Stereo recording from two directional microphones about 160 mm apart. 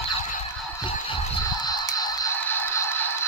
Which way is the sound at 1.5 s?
25° left (ahead or behind).